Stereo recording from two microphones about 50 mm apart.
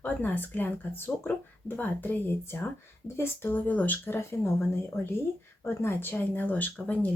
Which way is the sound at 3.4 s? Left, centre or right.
Left.